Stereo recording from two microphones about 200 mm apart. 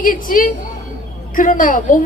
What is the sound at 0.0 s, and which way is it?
A woman's voice, 45° left (ahead or behind).